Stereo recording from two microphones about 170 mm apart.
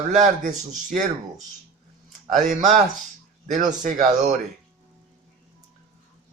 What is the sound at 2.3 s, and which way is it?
Speech, 45° right (ahead or behind).